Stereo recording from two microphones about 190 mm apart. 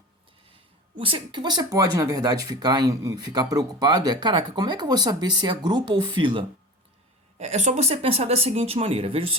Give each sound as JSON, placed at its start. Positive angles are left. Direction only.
{"t": 0.9, "sound": "speech", "side_deg": -30}
{"t": 7.3, "sound": "speech", "side_deg": -35}